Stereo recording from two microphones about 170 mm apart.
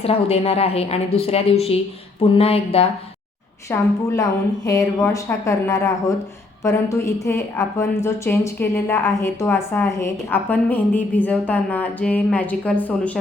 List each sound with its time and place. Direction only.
0.0 s a woman's voice: 35° left (ahead or behind)
3.7 s a woman's voice: 20° left (ahead or behind)